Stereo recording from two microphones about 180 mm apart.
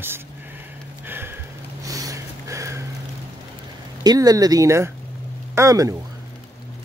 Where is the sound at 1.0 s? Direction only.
10° right (ahead or behind).